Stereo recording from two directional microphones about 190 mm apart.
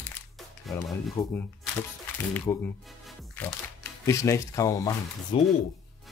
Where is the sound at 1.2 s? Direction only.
15° left (ahead or behind).